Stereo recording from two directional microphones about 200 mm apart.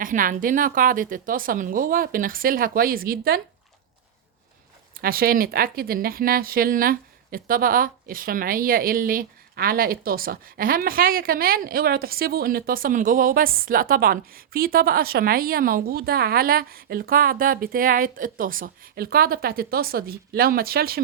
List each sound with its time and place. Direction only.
0.0 s speech: 40° right (ahead or behind)
4.9 s speech: 45° right (ahead or behind)